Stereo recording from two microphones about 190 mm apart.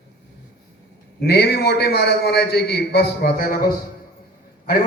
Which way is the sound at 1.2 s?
55° left (ahead or behind).